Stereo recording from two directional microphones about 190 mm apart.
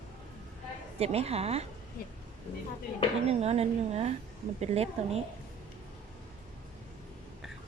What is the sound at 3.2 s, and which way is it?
A woman's voice, 35° right (ahead or behind).